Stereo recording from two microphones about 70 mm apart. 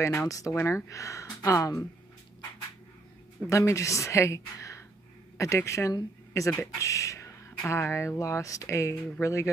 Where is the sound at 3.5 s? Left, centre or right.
Left.